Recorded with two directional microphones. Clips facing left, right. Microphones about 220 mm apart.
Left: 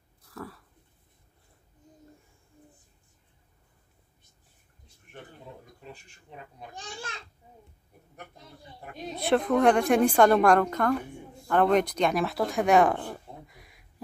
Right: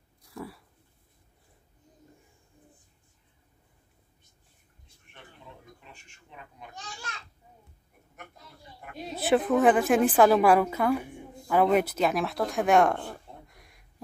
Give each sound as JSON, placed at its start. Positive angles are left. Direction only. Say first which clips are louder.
{"t": 0.3, "sound": "a sound", "louder": "right 1 dB", "side_deg": -15}
{"t": 5.8, "sound": "a child's voice", "louder": "left 7 dB", "side_deg": 35}
{"t": 8.9, "sound": "speech", "louder": "right 1 dB", "side_deg": -5}